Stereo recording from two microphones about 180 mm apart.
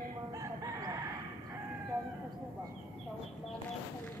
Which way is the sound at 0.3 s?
20° right (ahead or behind).